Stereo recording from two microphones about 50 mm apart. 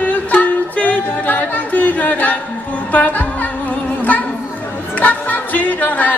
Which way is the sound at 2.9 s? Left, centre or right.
Left.